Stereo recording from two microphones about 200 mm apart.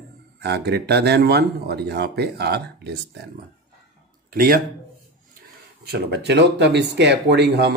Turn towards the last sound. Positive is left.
turn(degrees=-55)  # may be behind; listen again after turning